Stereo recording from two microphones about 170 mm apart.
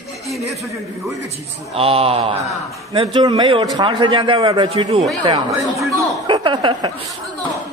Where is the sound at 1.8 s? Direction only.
35° right (ahead or behind).